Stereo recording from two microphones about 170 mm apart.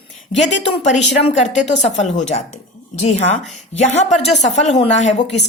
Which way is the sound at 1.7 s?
45° left (ahead or behind).